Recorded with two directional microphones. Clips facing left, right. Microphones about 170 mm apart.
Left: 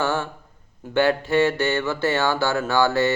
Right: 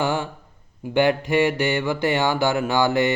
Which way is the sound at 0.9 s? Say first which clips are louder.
Even; 15° right (ahead or behind).